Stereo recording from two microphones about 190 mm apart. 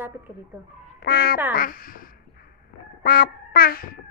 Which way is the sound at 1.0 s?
55° left (ahead or behind).